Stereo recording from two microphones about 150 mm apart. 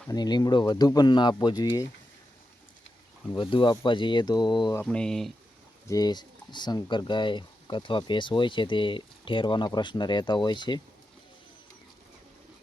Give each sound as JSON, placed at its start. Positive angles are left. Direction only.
{"t": 0.1, "sound": "speech", "side_deg": 30}
{"t": 3.3, "sound": "speech", "side_deg": 35}
{"t": 4.8, "sound": "speech", "side_deg": 5}
{"t": 5.9, "sound": "speech", "side_deg": 25}